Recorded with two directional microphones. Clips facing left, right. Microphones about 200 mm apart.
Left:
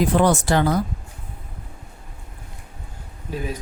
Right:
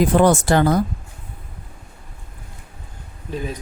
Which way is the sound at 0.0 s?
50° right (ahead or behind).